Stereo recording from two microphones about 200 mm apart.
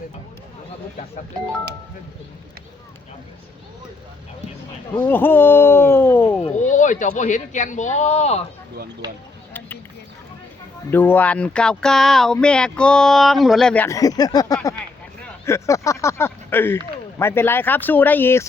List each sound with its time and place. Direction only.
4.9 s speech: 10° left (ahead or behind)
6.6 s speech: 40° left (ahead or behind)
9.5 s a sound: 10° left (ahead or behind)
10.9 s speech: 10° left (ahead or behind)